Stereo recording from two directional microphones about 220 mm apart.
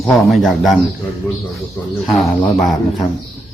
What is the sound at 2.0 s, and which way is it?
Speech, centre (ahead or behind).